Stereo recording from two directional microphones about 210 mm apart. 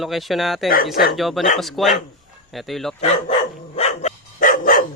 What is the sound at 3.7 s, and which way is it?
Dog, 30° left (ahead or behind).